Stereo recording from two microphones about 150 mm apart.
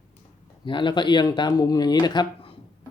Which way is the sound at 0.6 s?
30° left (ahead or behind).